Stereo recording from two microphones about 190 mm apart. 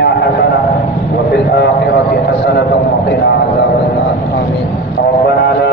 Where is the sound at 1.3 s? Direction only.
60° left (ahead or behind).